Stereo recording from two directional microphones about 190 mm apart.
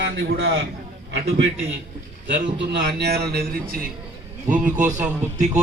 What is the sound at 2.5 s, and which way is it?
A man's voice, 60° right (ahead or behind).